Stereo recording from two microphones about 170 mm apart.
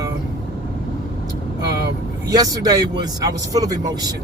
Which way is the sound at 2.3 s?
20° right (ahead or behind).